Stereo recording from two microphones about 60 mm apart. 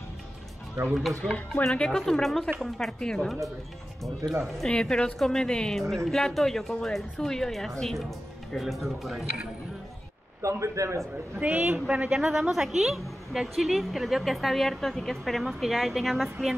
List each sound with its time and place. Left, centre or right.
1.2 s speech: left
1.6 s speech: centre
4.2 s a man's voice: right
4.6 s a woman's voice: centre
10.4 s a man's voice: right
11.3 s a man's voice: right
12.1 s a woman's voice: centre